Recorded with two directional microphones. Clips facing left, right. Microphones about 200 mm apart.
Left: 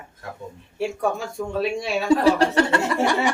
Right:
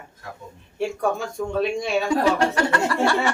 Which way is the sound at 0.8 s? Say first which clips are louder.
Right 1 dB; centre (ahead or behind).